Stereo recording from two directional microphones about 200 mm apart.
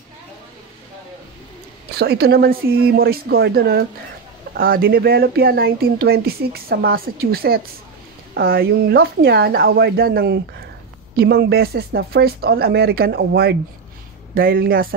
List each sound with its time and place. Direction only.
2.0 s speech: 50° right (ahead or behind)